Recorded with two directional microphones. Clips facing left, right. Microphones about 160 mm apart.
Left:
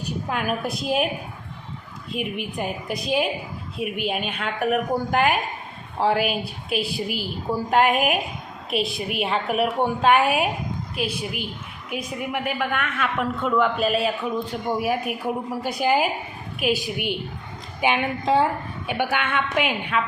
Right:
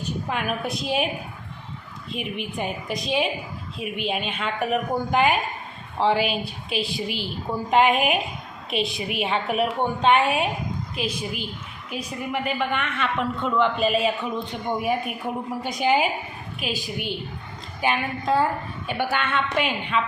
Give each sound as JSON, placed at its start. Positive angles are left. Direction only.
{"t": 0.3, "sound": "a man's voice", "side_deg": 5}
{"t": 2.1, "sound": "a man's voice", "side_deg": 5}
{"t": 11.9, "sound": "a woman's voice", "side_deg": 55}
{"t": 12.3, "sound": "a man's voice", "side_deg": 10}